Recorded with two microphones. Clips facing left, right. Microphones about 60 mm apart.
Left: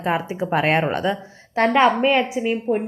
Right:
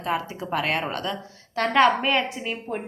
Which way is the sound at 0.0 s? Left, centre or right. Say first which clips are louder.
Left 5 dB; left.